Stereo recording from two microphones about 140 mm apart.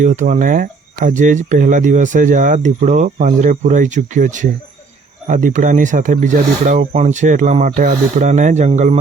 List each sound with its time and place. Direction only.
0.0 s speech: 60° right (ahead or behind)